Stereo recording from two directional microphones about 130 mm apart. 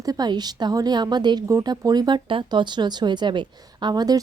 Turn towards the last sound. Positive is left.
turn(degrees=-30)  # may be behind; listen again after turning